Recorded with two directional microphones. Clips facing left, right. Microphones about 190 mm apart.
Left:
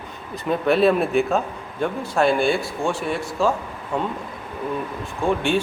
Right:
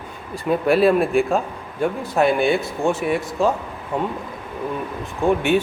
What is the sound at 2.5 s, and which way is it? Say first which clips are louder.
Speech: right 3 dB; 20° right (ahead or behind).